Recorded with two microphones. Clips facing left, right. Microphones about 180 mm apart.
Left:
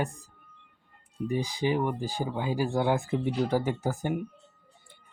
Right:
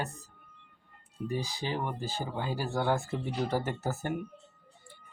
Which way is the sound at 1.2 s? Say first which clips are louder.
Left 6 dB; 15° left (ahead or behind).